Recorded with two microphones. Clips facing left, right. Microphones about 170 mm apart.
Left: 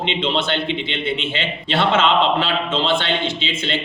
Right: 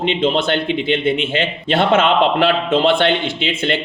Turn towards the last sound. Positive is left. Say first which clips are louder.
# right 4 dB
turn(degrees=-55)  # may be behind; listen again after turning